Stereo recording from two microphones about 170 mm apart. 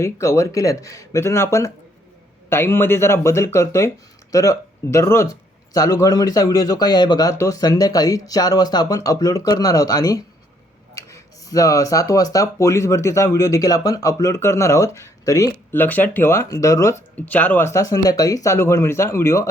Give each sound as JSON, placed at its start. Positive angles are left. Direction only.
{"t": 0.0, "sound": "speech", "side_deg": 15}